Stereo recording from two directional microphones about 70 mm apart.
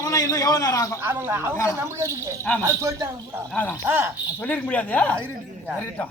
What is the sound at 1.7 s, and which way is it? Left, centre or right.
Speech, right.